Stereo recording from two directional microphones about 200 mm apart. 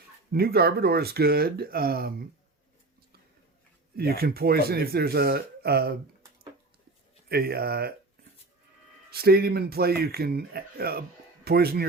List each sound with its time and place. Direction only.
0.3 s speech: 50° right (ahead or behind)
3.9 s speech: 50° right (ahead or behind)
7.3 s speech: 50° right (ahead or behind)
9.1 s speech: 50° right (ahead or behind)